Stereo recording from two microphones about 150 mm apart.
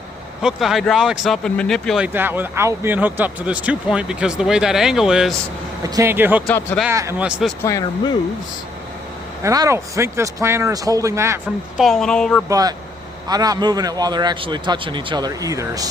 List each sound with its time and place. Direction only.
0.4 s speech: centre (ahead or behind)
2.1 s speech: 15° right (ahead or behind)
5.8 s a man's voice: 20° right (ahead or behind)
7.2 s speech: 5° right (ahead or behind)
7.6 s speech: 25° left (ahead or behind)
9.4 s a man's voice: 20° right (ahead or behind)
11.8 s speech: centre (ahead or behind)
12.5 s a man's voice: 25° right (ahead or behind)